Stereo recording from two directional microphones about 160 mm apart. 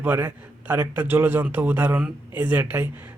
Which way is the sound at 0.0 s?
10° right (ahead or behind).